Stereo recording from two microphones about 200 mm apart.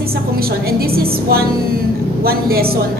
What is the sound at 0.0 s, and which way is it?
A woman's voice, 50° right (ahead or behind).